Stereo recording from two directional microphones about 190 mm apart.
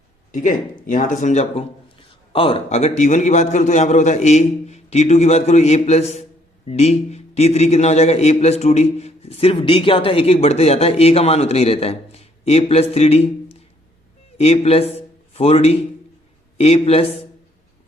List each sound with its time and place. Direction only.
0.3 s a man's voice: 45° left (ahead or behind)